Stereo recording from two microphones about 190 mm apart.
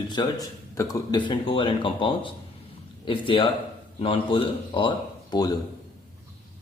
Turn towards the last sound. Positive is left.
turn(degrees=20)  # may be behind; listen again after turning